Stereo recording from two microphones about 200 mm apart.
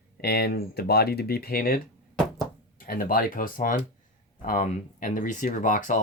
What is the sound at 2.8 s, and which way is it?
Speech, 45° left (ahead or behind).